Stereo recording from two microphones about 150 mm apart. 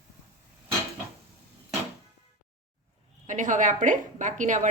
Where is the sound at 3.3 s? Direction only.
55° right (ahead or behind).